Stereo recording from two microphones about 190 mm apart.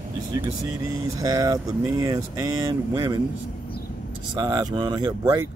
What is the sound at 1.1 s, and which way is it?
Speech, 20° right (ahead or behind).